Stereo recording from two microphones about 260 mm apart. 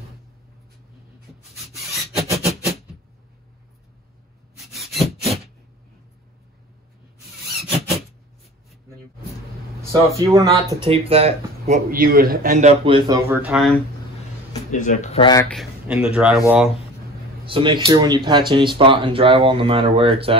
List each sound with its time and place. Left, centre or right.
1.8 s rub: centre
4.6 s rub: centre
10.3 s speech: centre
14.7 s speech: left
15.4 s speech: centre
17.5 s speech: centre